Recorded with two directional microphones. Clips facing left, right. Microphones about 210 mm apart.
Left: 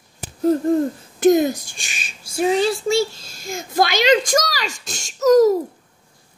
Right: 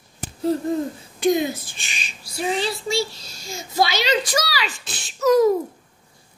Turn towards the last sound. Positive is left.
turn(degrees=40)  # may be behind; listen again after turning